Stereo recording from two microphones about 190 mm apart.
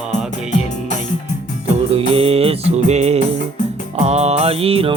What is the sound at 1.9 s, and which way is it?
Music, 30° right (ahead or behind).